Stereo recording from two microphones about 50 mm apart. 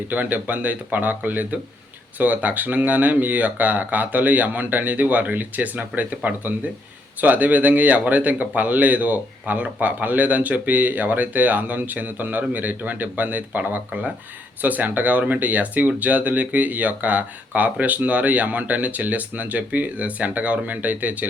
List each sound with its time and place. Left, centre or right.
0.1 s speech: right